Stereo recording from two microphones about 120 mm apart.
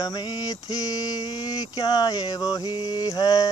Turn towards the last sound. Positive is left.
turn(degrees=30)  # may be behind; listen again after turning